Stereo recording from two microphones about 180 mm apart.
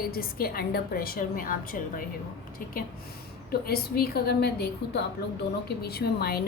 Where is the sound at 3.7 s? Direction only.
60° left (ahead or behind).